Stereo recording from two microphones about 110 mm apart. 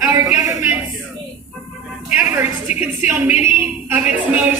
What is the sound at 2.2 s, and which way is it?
A man's voice, 15° right (ahead or behind).